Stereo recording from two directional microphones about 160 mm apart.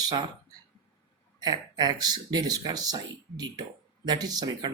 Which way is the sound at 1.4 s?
25° right (ahead or behind).